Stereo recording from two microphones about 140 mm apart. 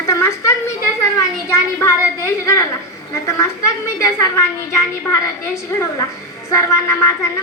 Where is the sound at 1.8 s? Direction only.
20° left (ahead or behind).